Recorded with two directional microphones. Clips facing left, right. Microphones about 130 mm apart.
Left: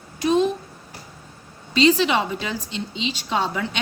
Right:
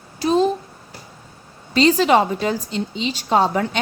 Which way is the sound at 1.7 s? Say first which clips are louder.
Right 3 dB; 45° right (ahead or behind).